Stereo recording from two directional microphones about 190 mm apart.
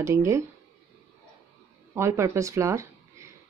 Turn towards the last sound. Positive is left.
turn(degrees=-15)  # may be behind; listen again after turning